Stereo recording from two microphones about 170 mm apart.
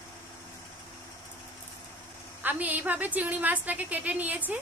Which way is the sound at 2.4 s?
10° right (ahead or behind).